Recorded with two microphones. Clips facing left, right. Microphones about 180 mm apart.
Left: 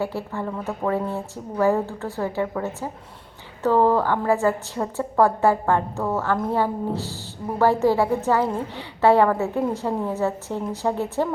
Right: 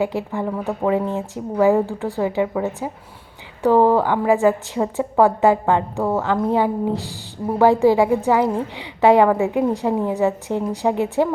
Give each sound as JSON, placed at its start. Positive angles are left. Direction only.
{"t": 0.0, "sound": "a woman's voice", "side_deg": -15}